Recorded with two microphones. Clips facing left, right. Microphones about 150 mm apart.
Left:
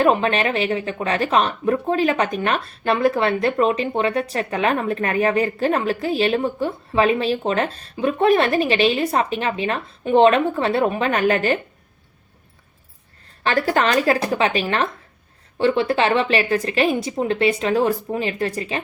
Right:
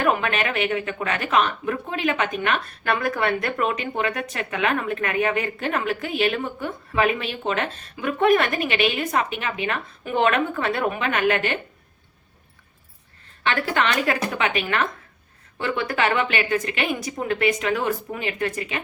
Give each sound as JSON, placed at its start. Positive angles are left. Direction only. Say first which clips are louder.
{"t": 0.0, "sound": "speech", "louder": "left 5 dB", "side_deg": 30}
{"t": 13.4, "sound": "speech", "louder": "left 4 dB", "side_deg": 35}